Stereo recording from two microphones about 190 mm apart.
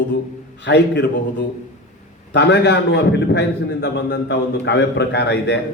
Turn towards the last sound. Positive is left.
turn(degrees=65)  # may be behind; listen again after turning